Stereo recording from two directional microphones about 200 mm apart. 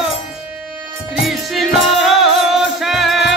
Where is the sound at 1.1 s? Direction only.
Centre (ahead or behind).